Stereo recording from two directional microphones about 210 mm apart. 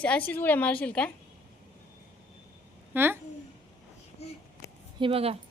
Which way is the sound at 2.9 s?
10° right (ahead or behind).